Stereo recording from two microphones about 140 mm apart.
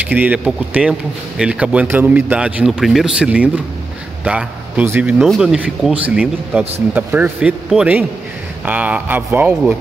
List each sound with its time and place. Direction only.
0.1 s speech: 10° right (ahead or behind)
4.2 s a sound: 5° right (ahead or behind)
4.8 s speech: 15° right (ahead or behind)
5.2 s speech: centre (ahead or behind)